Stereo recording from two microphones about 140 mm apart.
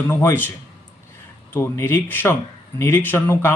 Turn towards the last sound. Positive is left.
turn(degrees=15)  # may be behind; listen again after turning